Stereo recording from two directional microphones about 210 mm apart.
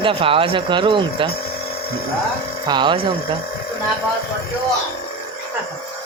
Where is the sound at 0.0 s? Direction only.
25° right (ahead or behind).